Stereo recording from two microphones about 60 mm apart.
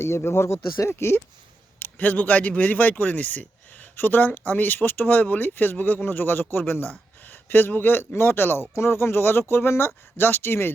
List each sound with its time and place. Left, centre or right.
0.0 s speech: left
1.8 s speech: left